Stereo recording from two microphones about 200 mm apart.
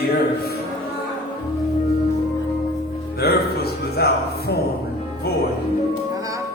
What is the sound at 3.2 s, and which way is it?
Music, 55° left (ahead or behind).